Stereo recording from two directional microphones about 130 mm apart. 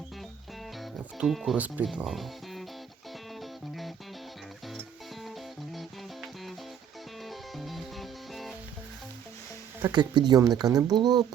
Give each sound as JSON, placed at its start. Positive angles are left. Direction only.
{"t": 0.8, "sound": "music", "side_deg": 0}
{"t": 1.5, "sound": "speech", "side_deg": -10}
{"t": 3.4, "sound": "music", "side_deg": 0}
{"t": 5.2, "sound": "music", "side_deg": 0}
{"t": 7.3, "sound": "music", "side_deg": 0}
{"t": 9.9, "sound": "speech", "side_deg": -35}